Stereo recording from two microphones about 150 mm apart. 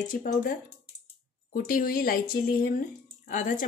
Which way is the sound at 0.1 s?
65° left (ahead or behind).